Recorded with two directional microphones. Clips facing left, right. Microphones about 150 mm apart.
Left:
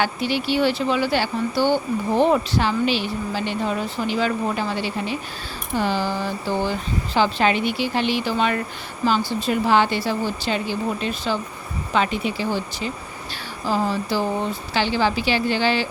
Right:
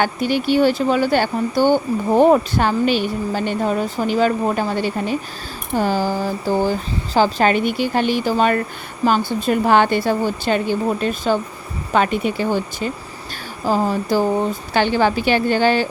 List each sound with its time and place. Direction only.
0.0 s speech: 50° right (ahead or behind)